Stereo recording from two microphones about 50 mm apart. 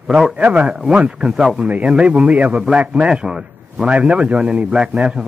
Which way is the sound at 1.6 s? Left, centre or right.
Right.